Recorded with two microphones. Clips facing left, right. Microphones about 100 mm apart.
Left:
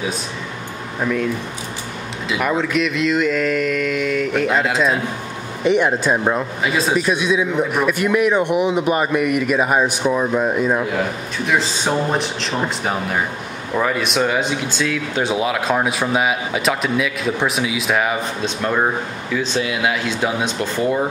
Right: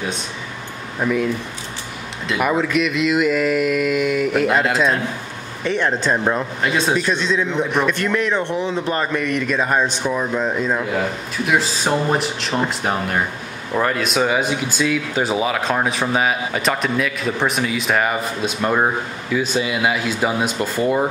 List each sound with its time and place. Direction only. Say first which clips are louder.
1.0 s speech: right 1 dB; 5° right (ahead or behind)
2.2 s speech: right 1 dB; centre (ahead or behind)
5.6 s speech: left 4 dB; 15° left (ahead or behind)
11.4 s speech: even; 5° right (ahead or behind)